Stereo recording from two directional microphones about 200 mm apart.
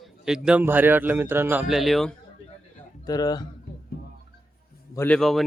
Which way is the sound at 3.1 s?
20° left (ahead or behind).